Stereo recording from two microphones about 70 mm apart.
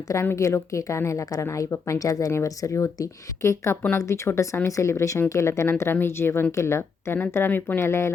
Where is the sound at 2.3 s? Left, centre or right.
Left.